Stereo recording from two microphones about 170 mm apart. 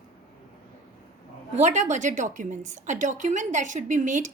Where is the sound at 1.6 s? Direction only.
45° right (ahead or behind).